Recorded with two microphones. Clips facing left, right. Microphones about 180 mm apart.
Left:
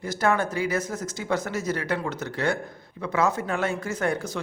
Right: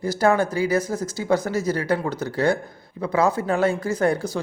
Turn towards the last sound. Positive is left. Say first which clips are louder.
# right 5 dB
turn(degrees=-35)  # may be behind; listen again after turning